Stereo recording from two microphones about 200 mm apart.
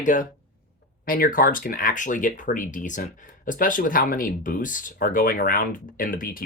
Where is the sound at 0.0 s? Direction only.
40° left (ahead or behind).